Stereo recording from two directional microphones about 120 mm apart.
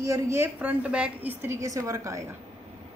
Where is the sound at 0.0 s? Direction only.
25° right (ahead or behind).